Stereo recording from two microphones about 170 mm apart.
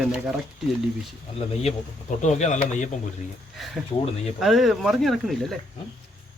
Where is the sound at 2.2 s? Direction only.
45° left (ahead or behind).